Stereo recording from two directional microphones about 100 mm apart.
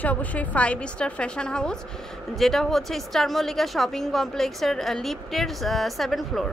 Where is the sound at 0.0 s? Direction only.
15° left (ahead or behind).